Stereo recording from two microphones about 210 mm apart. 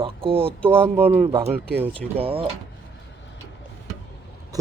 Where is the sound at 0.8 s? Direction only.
10° right (ahead or behind).